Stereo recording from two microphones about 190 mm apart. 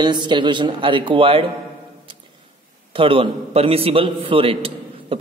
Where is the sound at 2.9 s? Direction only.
30° right (ahead or behind).